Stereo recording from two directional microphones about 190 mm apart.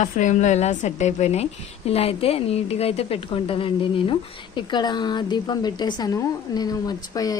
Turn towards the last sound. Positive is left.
turn(degrees=20)  # may be behind; listen again after turning